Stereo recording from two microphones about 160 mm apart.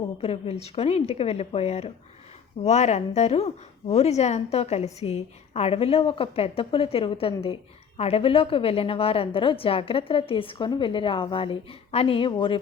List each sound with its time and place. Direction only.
0.2 s a woman's voice: 40° left (ahead or behind)